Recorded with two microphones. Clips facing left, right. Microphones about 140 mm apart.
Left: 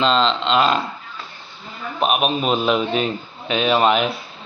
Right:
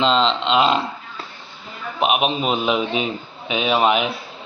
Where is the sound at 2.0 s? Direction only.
15° right (ahead or behind).